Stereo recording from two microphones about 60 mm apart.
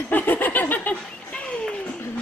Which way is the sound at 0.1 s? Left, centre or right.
Left.